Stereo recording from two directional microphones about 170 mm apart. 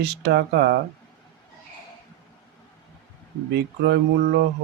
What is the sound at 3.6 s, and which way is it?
Speech, 80° right.